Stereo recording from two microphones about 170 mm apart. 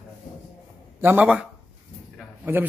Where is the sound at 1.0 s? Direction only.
10° right (ahead or behind).